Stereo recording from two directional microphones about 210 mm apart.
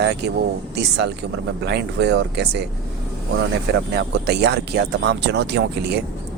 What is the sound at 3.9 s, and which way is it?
Speech, 50° right (ahead or behind).